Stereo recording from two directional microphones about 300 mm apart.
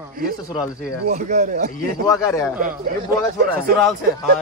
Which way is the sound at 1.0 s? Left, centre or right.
Right.